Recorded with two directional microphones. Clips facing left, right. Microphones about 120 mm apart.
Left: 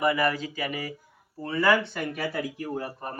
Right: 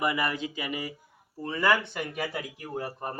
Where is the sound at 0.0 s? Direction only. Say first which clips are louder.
Left 4 dB; 20° right (ahead or behind).